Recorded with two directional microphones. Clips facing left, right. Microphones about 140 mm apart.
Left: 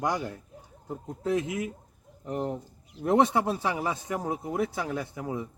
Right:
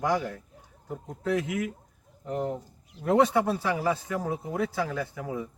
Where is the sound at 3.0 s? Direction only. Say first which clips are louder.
Right 1 dB; 20° left (ahead or behind).